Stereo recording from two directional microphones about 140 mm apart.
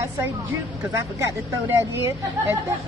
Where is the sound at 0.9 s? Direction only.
20° right (ahead or behind).